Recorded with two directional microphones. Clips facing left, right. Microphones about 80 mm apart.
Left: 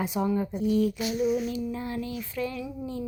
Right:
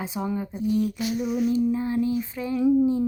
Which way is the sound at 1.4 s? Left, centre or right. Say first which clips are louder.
Right 8 dB; right.